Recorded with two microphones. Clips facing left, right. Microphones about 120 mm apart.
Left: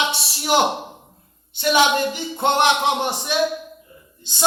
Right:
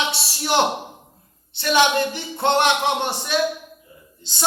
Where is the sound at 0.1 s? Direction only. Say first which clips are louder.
Left 2 dB; 15° left (ahead or behind).